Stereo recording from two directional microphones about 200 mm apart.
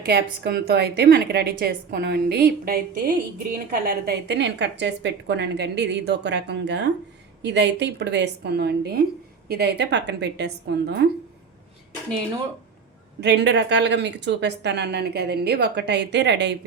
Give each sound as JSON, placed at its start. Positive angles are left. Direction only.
{"t": 0.0, "sound": "a woman's voice", "side_deg": -55}
{"t": 13.1, "sound": "a woman's voice", "side_deg": -60}